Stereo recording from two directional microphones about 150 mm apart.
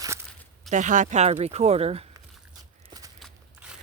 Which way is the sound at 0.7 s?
55° right (ahead or behind).